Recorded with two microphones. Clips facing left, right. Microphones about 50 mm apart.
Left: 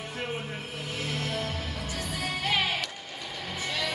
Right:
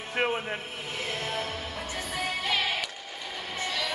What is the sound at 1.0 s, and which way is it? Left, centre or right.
Music, right.